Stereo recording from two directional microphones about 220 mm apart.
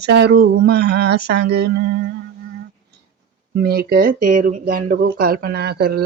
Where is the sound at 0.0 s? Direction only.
50° right (ahead or behind).